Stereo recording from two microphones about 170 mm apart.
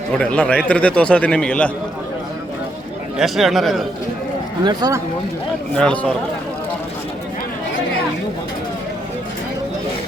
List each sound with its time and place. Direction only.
0.2 s a man's voice: 5° left (ahead or behind)
3.2 s speech: centre (ahead or behind)
4.6 s speech: 25° right (ahead or behind)
5.7 s a man's voice: 5° left (ahead or behind)